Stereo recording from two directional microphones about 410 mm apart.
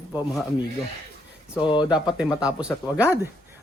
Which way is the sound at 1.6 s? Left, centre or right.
Centre.